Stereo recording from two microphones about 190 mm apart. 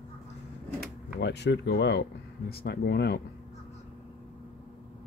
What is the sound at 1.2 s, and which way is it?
Speech, 65° left (ahead or behind).